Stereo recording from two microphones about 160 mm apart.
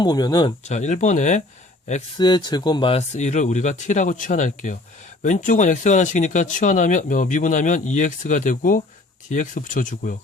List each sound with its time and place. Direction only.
0.0 s speech: 25° left (ahead or behind)
0.6 s speech: 45° left (ahead or behind)
2.1 s speech: 25° left (ahead or behind)
3.1 s speech: 45° left (ahead or behind)